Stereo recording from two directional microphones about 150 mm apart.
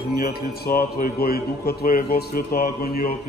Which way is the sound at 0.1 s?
90° left.